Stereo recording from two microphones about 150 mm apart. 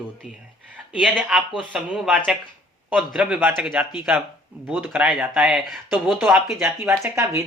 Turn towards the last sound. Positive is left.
turn(degrees=-20)  # may be behind; listen again after turning